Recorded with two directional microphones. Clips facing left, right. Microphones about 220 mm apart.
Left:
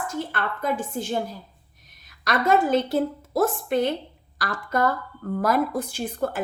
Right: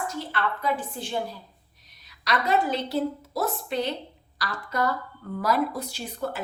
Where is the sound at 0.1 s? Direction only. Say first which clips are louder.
Left 1 dB; 50° left (ahead or behind).